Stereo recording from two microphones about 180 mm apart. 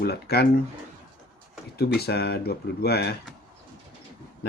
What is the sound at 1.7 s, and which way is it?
Speech, 60° left (ahead or behind).